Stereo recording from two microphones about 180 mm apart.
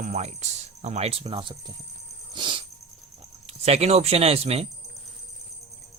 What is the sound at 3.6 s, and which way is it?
Speech, 35° right (ahead or behind).